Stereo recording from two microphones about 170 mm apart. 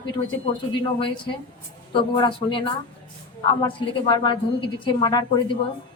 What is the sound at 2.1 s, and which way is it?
A man's voice, 25° left (ahead or behind).